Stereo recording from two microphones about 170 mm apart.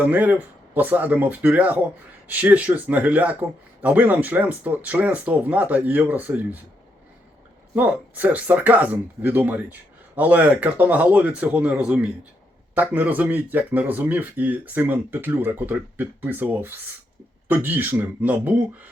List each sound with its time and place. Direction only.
0.0 s speech: 10° right (ahead or behind)
7.8 s speech: 10° right (ahead or behind)